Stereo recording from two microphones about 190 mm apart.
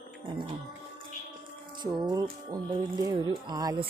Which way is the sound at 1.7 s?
25° right (ahead or behind).